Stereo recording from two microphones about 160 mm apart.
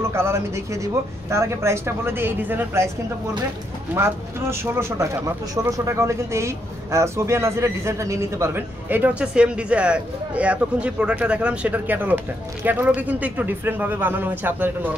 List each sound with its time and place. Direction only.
0.0 s speech: 15° right (ahead or behind)
3.9 s speech: 15° right (ahead or behind)